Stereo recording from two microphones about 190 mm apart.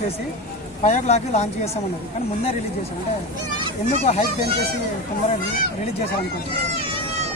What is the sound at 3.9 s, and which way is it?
Speech, 35° left (ahead or behind).